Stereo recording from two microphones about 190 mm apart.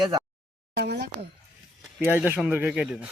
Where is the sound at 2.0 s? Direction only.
10° right (ahead or behind).